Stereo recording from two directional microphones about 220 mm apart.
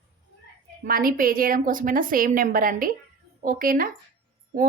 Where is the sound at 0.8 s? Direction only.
40° right (ahead or behind).